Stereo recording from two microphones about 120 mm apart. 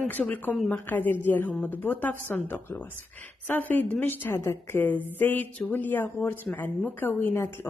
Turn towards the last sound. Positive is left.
turn(degrees=20)  # may be behind; listen again after turning